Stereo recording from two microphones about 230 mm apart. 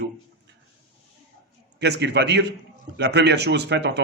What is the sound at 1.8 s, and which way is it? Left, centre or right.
A man's voice, right.